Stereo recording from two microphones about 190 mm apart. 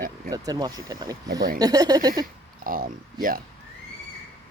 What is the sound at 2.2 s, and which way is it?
Speech, 50° right (ahead or behind).